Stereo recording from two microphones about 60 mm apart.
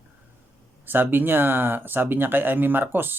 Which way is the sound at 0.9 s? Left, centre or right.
Right.